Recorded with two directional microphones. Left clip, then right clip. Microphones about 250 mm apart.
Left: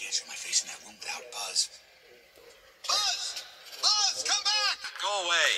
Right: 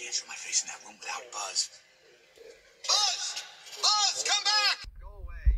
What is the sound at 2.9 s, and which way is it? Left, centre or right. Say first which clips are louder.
Music: right 1 dB; centre.